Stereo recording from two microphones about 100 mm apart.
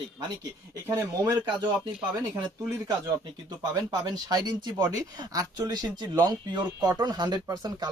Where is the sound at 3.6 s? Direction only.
35° right (ahead or behind).